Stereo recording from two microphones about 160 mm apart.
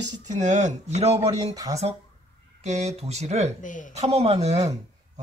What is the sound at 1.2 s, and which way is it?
Speech, 20° right (ahead or behind).